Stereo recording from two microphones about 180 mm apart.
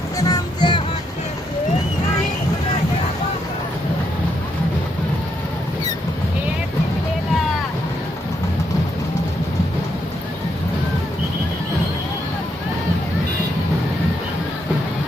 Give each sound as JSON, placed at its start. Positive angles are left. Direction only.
{"t": 0.2, "sound": "music", "side_deg": 20}